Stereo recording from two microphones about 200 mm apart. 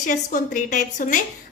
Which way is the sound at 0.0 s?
40° left (ahead or behind).